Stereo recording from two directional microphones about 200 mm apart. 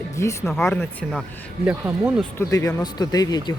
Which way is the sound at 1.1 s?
5° right (ahead or behind).